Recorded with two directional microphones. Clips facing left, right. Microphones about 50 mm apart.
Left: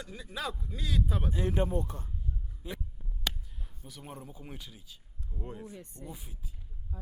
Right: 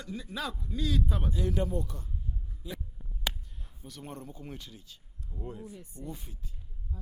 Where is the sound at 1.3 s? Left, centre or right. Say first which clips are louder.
Left 1 dB; left.